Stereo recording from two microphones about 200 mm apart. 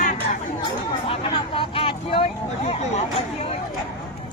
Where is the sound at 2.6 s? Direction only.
30° left (ahead or behind).